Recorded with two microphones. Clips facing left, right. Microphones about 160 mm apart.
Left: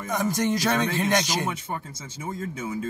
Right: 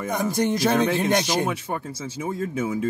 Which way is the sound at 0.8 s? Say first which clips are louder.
Right 3 dB; 60° right (ahead or behind).